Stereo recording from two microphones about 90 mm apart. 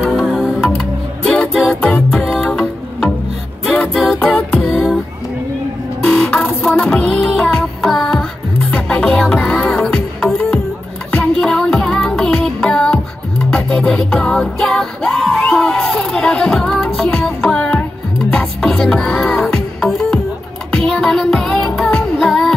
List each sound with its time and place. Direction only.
0.1 s music: centre (ahead or behind)
1.8 s music: 10° left (ahead or behind)
3.6 s music: 10° left (ahead or behind)
4.0 s a capella: centre (ahead or behind)
4.4 s music: 15° left (ahead or behind)
4.6 s music: centre (ahead or behind)
6.0 s music: 10° left (ahead or behind)
7.9 s music: 5° left (ahead or behind)